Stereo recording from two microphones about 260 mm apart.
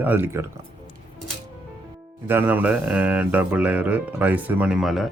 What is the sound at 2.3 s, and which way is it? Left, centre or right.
Speech, centre.